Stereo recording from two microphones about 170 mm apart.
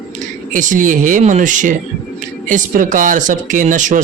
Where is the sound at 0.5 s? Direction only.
50° right (ahead or behind).